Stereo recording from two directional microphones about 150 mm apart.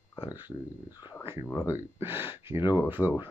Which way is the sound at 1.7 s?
15° right (ahead or behind).